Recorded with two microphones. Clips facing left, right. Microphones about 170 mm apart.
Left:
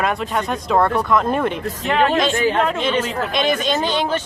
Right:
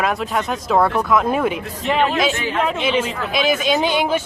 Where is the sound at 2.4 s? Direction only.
40° left (ahead or behind).